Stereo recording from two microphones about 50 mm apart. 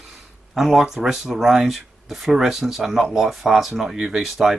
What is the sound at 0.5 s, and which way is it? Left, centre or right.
Speech, centre.